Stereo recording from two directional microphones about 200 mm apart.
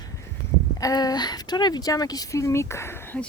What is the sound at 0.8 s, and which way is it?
Speech, 20° left (ahead or behind).